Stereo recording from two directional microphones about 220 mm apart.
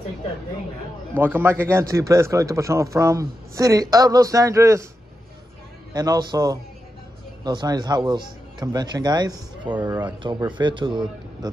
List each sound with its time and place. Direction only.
1.1 s a man's voice: 10° right (ahead or behind)
5.9 s a man's voice: 15° right (ahead or behind)
9.8 s a man's voice: 10° right (ahead or behind)
10.2 s a man's voice: 20° right (ahead or behind)